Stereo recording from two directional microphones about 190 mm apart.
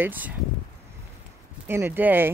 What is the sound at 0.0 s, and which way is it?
Speech, 10° right (ahead or behind).